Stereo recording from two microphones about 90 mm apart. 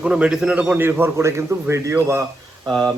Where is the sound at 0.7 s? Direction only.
25° right (ahead or behind).